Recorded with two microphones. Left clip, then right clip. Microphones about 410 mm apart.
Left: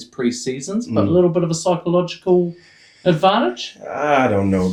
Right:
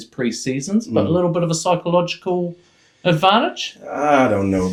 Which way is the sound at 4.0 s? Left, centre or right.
Left.